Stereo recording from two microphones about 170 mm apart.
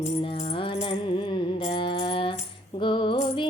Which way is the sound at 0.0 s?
35° left (ahead or behind).